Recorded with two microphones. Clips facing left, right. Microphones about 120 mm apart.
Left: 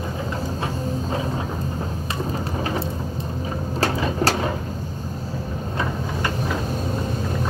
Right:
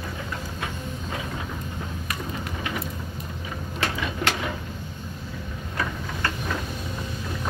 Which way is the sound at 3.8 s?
35° left (ahead or behind).